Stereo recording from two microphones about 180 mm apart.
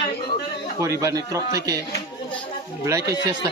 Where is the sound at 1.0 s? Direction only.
20° right (ahead or behind).